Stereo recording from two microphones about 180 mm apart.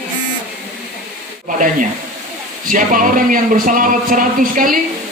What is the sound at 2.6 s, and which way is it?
Speech, 50° right (ahead or behind).